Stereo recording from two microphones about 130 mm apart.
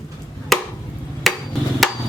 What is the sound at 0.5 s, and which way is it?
Chop, centre (ahead or behind).